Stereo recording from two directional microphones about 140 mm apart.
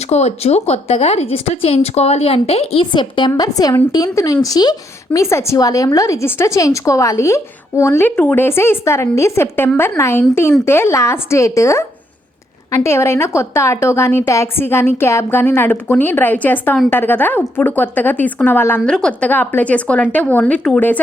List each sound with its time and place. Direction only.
0.1 s a woman's voice: 50° left (ahead or behind); by 21.0 s 10° left (ahead or behind)